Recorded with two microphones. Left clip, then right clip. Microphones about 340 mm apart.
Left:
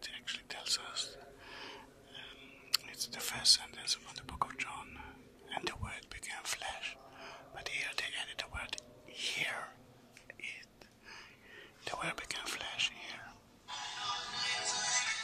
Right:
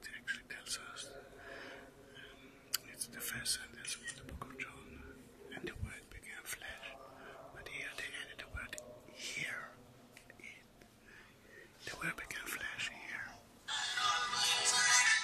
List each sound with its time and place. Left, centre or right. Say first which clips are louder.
0.0 s whispering: even; centre
2.1 s whispering: left 7 dB; centre
12.0 s whispering: left 1 dB; centre
13.7 s music: right 5 dB; right